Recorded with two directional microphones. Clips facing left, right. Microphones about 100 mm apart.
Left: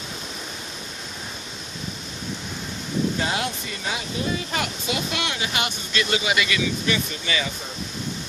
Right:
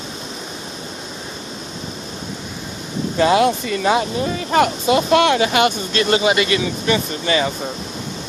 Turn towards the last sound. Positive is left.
turn(degrees=-45)  # may be behind; listen again after turning